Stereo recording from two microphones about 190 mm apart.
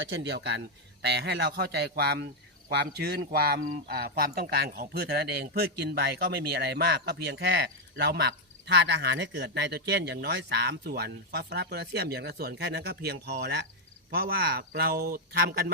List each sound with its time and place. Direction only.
0.1 s speech: 65° right (ahead or behind)